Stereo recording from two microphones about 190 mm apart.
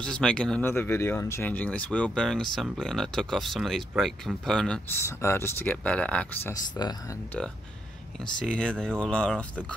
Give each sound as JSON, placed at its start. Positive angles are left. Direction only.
{"t": 0.0, "sound": "speech", "side_deg": 5}
{"t": 6.5, "sound": "speech", "side_deg": 20}
{"t": 8.2, "sound": "speech", "side_deg": 5}